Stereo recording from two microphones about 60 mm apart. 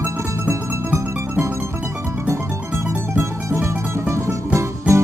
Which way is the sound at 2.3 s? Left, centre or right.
Right.